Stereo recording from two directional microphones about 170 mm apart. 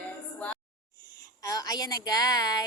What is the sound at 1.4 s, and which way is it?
A woman's voice, 20° left (ahead or behind).